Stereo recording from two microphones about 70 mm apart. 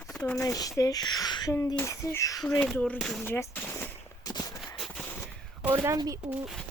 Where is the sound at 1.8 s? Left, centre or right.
Left.